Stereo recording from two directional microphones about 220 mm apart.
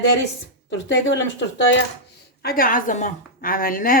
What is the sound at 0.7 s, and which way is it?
Speech, 55° left (ahead or behind).